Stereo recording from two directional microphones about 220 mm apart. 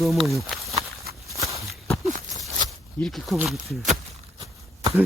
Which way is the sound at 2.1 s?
35° right (ahead or behind).